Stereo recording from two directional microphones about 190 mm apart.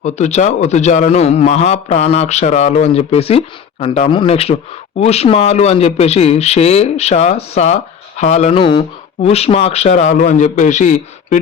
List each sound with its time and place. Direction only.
0.0 s a man's voice: 35° left (ahead or behind)